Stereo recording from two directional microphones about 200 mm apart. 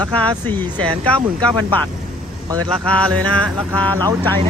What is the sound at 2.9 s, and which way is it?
Mantra, 5° left (ahead or behind).